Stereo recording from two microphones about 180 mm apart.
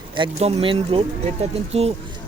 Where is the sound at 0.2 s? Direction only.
35° right (ahead or behind).